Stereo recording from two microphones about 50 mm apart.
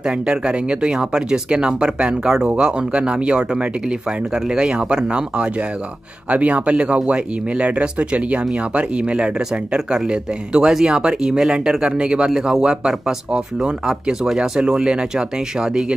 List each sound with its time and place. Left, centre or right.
0.0 s speech: centre
4.5 s speech: centre